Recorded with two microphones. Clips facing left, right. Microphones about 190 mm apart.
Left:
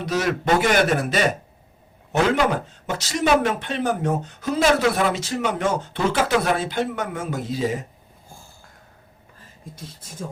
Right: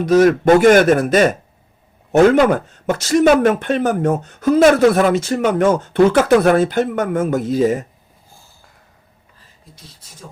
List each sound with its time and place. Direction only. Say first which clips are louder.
0.0 s speech: right 11 dB; 45° right (ahead or behind)